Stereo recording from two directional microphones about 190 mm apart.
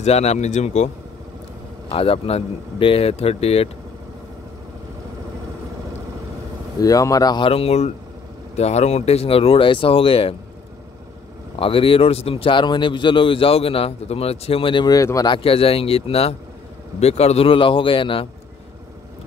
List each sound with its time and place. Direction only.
0.0 s speech: 35° left (ahead or behind)
1.9 s speech: 30° left (ahead or behind)
6.8 s a man's voice: 20° left (ahead or behind)
11.5 s a man's voice: 30° left (ahead or behind)